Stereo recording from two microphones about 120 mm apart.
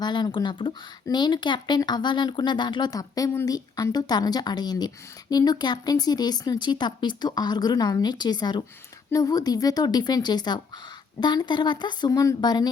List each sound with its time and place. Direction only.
0.0 s speech: 40° left (ahead or behind)